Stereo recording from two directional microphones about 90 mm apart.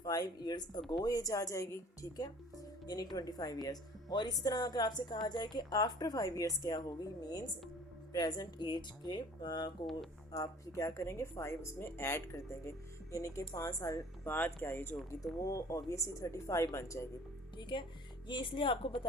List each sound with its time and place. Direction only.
0.0 s speech: 45° left (ahead or behind)
1.0 s speech: 40° left (ahead or behind)
10.7 s speech: 35° left (ahead or behind)
14.3 s speech: 20° left (ahead or behind)
15.2 s speech: 35° left (ahead or behind)
17.6 s speech: 60° left (ahead or behind)